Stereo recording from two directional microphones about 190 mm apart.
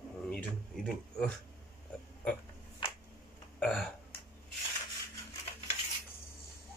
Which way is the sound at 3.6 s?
5° left (ahead or behind).